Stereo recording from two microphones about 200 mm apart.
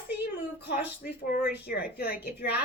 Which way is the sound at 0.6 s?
45° left (ahead or behind).